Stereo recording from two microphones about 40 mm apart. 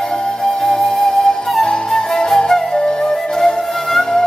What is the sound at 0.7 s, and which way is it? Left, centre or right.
Music, centre.